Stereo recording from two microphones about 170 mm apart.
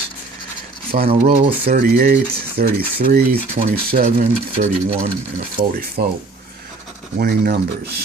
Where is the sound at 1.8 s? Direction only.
60° right (ahead or behind).